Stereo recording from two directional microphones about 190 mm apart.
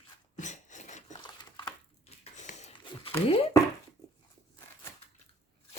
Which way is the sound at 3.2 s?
30° left (ahead or behind).